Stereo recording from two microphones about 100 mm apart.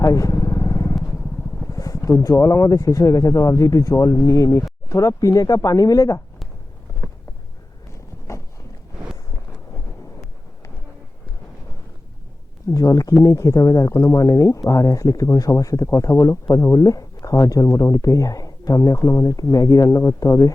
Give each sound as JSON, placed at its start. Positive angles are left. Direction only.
{"t": 0.0, "sound": "vehicle", "side_deg": 35}
{"t": 1.6, "sound": "speech", "side_deg": 35}
{"t": 8.3, "sound": "a sound", "side_deg": 30}
{"t": 12.6, "sound": "speech", "side_deg": 35}